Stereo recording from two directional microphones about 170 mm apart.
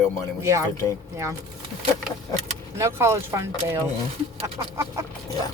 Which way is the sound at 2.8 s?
15° right (ahead or behind).